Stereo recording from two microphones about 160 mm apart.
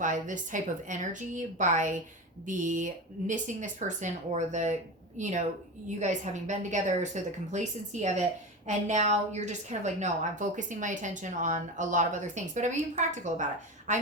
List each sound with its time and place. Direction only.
0.0 s a woman's voice: 50° right (ahead or behind)